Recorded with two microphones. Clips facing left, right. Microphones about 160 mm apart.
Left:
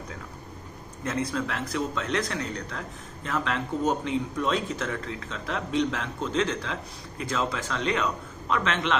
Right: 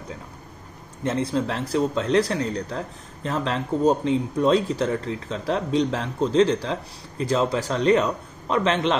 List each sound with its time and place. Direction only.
1.0 s speech: 30° right (ahead or behind)